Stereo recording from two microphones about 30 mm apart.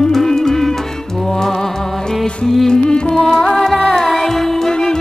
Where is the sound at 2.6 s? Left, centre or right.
Left.